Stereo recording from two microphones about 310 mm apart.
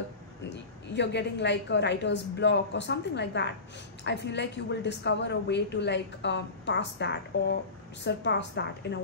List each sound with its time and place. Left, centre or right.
0.4 s a woman's voice: left